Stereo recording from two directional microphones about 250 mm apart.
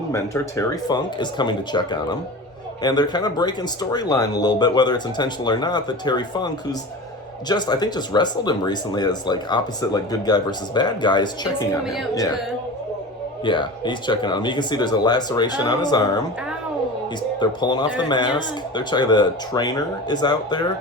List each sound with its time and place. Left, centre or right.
0.1 s speech: centre
13.4 s speech: centre
17.4 s speech: centre